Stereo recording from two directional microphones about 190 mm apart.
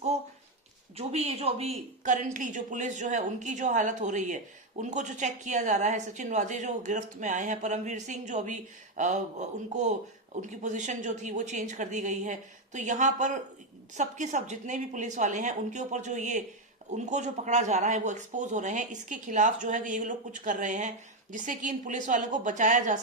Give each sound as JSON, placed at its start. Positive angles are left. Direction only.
{"t": 0.9, "sound": "a woman's voice", "side_deg": -30}